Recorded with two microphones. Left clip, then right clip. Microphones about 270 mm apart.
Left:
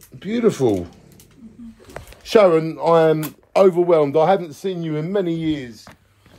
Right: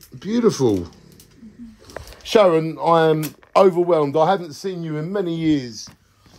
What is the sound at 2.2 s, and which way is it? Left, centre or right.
Speech, centre.